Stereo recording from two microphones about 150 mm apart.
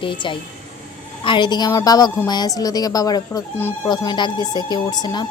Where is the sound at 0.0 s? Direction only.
35° left (ahead or behind).